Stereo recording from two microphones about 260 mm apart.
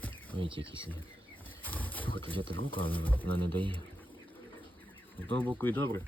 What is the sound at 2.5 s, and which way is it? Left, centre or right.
Speech, centre.